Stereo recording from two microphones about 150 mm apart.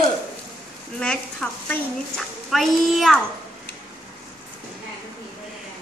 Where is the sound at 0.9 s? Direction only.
5° left (ahead or behind).